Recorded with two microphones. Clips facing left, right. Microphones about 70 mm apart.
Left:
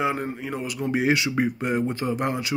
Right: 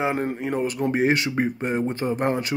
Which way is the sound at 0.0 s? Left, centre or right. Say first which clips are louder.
Right 2 dB; right.